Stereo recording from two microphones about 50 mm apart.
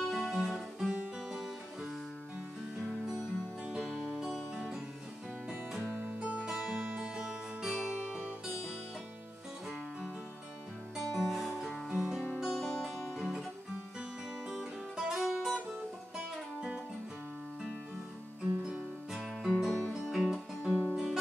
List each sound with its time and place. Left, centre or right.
0.1 s guitar: centre
0.9 s music: centre
2.9 s music: centre
5.9 s music: right
6.6 s music: right
7.0 s music: centre
11.1 s music: centre
14.5 s music: centre
18.7 s music: centre
19.6 s music: centre